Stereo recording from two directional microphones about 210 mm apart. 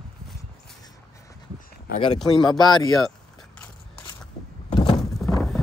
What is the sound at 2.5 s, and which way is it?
Speech, 20° left (ahead or behind).